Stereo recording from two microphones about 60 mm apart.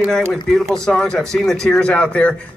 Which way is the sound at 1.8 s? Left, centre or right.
Left.